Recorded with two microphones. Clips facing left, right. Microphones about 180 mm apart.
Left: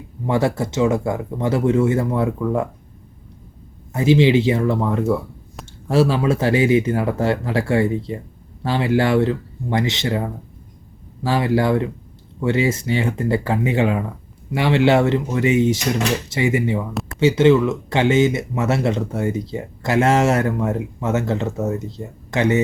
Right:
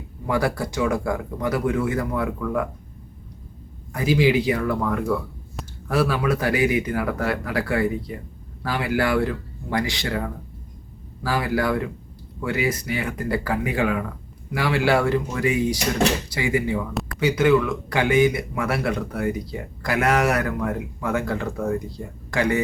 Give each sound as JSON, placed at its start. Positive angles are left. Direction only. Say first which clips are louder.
{"t": 0.3, "sound": "speech", "louder": "left 4 dB", "side_deg": 25}
{"t": 3.9, "sound": "speech", "louder": "left 5 dB", "side_deg": 25}
{"t": 5.6, "sound": "a sound", "louder": "right 2 dB", "side_deg": 0}
{"t": 5.9, "sound": "speech", "louder": "left 4 dB", "side_deg": 25}